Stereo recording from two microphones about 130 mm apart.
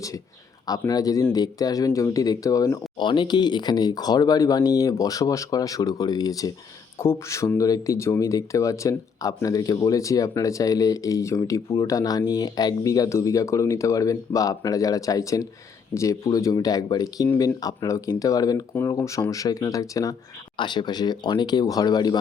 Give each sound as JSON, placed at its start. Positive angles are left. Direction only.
{"t": 0.7, "sound": "speech", "side_deg": 30}